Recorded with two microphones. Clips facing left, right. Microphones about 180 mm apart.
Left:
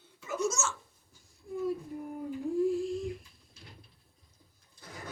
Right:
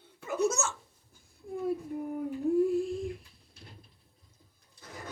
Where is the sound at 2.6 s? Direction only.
55° right (ahead or behind).